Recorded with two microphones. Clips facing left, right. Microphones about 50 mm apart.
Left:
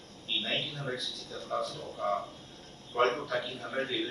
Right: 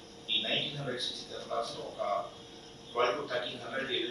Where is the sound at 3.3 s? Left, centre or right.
Left.